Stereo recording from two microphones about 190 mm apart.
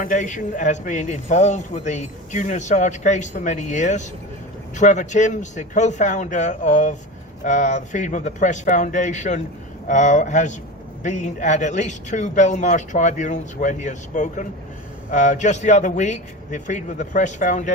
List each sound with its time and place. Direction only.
0.0 s a man's voice: 40° left (ahead or behind)